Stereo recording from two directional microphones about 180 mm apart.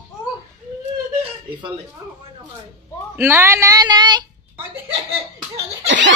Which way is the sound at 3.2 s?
10° right (ahead or behind).